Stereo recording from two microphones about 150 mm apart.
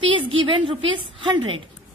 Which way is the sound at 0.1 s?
35° right (ahead or behind).